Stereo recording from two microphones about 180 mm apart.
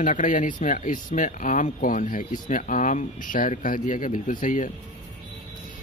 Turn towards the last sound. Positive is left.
turn(degrees=45)  # may be behind; listen again after turning